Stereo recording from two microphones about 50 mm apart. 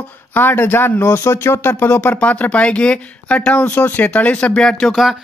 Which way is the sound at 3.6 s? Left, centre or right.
Left.